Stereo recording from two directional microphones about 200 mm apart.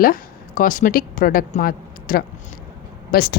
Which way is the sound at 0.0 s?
45° left (ahead or behind).